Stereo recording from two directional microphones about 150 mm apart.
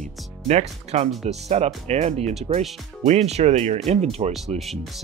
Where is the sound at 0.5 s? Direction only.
45° right (ahead or behind).